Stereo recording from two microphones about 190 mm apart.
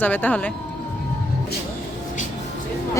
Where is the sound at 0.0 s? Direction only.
10° left (ahead or behind).